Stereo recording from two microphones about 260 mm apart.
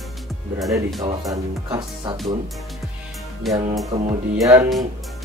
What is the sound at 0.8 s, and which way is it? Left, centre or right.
Music, centre.